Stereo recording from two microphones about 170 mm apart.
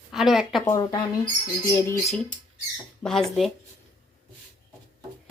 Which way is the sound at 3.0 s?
Centre (ahead or behind).